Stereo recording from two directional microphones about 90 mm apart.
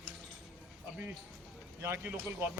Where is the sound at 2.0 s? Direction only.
20° right (ahead or behind).